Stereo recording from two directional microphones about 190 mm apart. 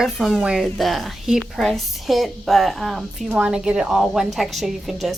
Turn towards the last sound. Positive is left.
turn(degrees=0)  # may be behind; listen again after turning